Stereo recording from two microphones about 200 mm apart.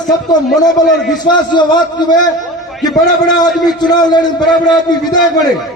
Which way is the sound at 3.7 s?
20° left (ahead or behind).